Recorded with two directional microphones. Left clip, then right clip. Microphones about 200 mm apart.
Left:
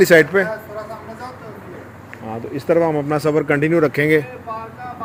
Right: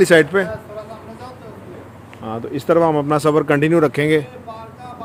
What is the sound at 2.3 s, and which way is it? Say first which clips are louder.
Speech: right 1 dB; 20° right (ahead or behind).